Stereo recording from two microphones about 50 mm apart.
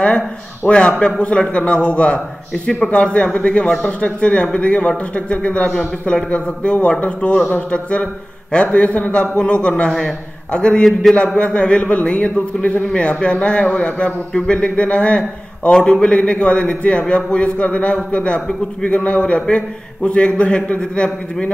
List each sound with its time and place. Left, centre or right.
0.7 s a man's voice: left
5.7 s a man's voice: centre
6.0 s a man's voice: left